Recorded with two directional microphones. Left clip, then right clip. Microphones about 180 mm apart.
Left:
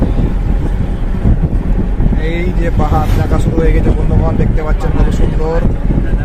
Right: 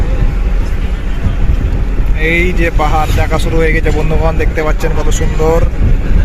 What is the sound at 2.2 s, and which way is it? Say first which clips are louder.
Speech: right 9 dB; 5° right (ahead or behind).